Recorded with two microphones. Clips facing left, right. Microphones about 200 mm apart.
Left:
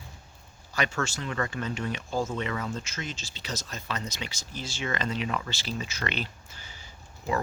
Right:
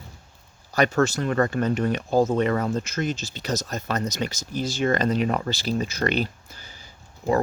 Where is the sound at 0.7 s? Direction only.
40° right (ahead or behind).